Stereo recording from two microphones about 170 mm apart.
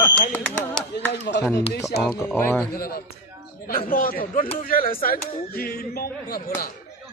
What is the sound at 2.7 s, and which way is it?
Speech, 60° left (ahead or behind).